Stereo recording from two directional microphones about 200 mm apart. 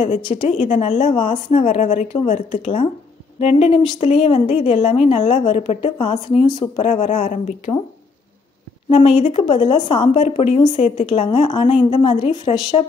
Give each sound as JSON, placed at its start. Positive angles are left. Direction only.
{"t": 0.0, "sound": "a woman's voice", "side_deg": 30}
{"t": 8.9, "sound": "a woman's voice", "side_deg": 30}